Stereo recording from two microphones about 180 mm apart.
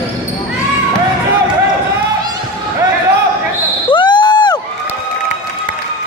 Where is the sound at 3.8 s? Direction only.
25° left (ahead or behind).